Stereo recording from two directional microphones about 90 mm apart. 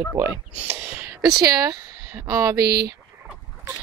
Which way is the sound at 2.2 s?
35° right (ahead or behind).